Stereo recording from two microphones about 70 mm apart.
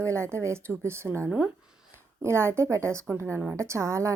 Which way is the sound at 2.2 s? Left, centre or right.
Right.